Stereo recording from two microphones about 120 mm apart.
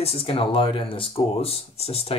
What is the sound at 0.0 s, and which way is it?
Speech, 50° left (ahead or behind).